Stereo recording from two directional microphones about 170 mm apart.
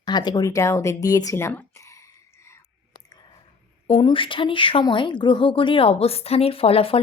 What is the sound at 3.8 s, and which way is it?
Speech, 30° left (ahead or behind).